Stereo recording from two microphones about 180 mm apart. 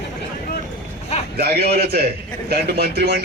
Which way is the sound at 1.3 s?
60° right (ahead or behind).